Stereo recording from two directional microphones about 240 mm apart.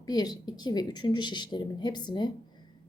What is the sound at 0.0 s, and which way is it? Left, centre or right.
A woman's voice, centre.